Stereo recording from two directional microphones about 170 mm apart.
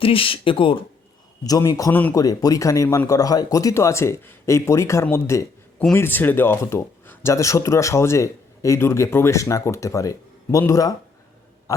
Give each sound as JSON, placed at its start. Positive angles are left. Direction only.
{"t": 0.0, "sound": "speech", "side_deg": 30}
{"t": 1.5, "sound": "a man's voice", "side_deg": 20}
{"t": 1.9, "sound": "speech", "side_deg": 10}
{"t": 2.1, "sound": "speech", "side_deg": 20}